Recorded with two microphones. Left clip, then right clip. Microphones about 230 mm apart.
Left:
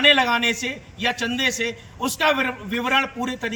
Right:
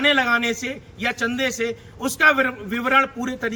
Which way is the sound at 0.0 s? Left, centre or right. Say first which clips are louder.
Left 2 dB; centre.